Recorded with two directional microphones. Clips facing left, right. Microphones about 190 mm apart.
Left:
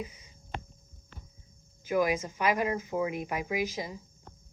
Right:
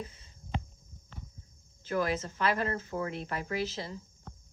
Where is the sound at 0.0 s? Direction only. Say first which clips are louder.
Left 3 dB; 10° left (ahead or behind).